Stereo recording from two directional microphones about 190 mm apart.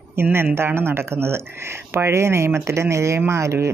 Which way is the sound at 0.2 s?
10° right (ahead or behind).